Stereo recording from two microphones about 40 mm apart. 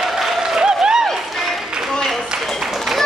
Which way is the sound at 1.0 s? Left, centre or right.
Centre.